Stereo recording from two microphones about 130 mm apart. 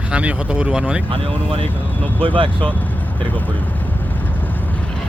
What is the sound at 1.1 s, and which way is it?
Speech, 45° right (ahead or behind).